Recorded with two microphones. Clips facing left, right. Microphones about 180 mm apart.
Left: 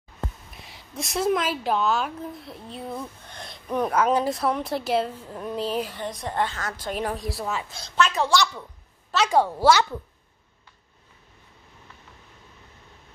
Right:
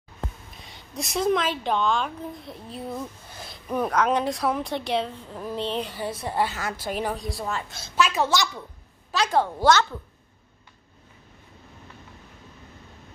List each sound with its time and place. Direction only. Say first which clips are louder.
0.5 s a woman's voice: even; centre (ahead or behind)
8.2 s a woman's voice: left 3 dB; 20° right (ahead or behind)
9.1 s a woman's voice: left 2 dB; 10° left (ahead or behind)